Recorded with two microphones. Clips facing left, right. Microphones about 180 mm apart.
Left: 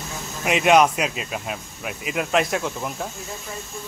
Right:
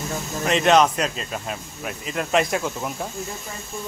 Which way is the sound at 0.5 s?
10° left (ahead or behind).